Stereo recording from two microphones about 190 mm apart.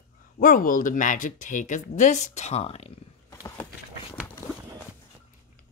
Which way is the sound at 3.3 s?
20° left (ahead or behind).